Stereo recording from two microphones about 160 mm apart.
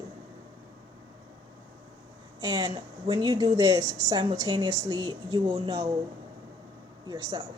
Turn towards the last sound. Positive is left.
turn(degrees=-25)  # may be behind; listen again after turning